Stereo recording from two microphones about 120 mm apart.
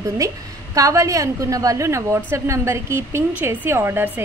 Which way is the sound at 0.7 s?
25° right (ahead or behind).